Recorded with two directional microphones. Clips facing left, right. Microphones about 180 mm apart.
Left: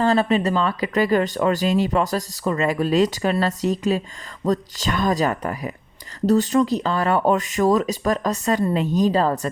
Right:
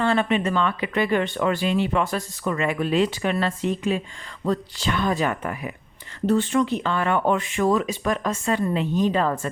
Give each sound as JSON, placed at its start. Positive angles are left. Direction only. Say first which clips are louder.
{"t": 0.0, "sound": "speech", "louder": "left 3 dB", "side_deg": 35}